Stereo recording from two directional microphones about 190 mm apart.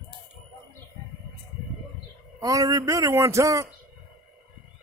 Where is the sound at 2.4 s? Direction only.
20° right (ahead or behind).